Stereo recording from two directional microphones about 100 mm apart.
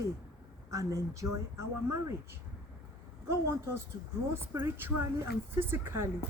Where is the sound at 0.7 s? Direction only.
35° right (ahead or behind).